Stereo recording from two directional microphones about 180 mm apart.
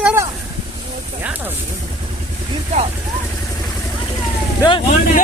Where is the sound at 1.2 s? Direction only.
10° right (ahead or behind).